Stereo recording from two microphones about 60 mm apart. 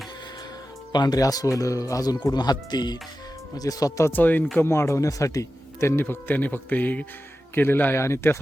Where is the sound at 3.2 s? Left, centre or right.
Left.